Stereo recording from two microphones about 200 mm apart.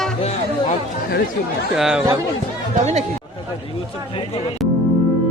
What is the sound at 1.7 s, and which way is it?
Speech, centre (ahead or behind).